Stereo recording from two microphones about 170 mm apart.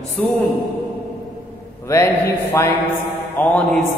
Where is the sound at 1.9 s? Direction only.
15° left (ahead or behind).